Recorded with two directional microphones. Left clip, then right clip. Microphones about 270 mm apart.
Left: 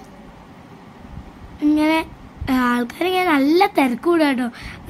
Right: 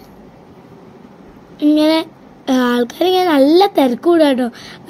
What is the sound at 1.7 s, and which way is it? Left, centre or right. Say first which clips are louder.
Speech: right 5 dB; centre.